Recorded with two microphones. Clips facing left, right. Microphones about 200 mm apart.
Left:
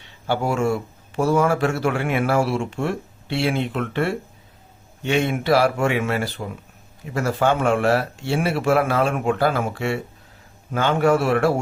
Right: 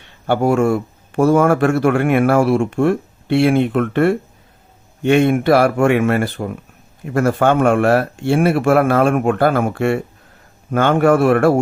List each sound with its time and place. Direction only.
0.0 s speech: 55° right (ahead or behind)